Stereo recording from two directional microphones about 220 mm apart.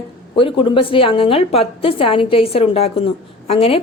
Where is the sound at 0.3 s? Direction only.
25° left (ahead or behind).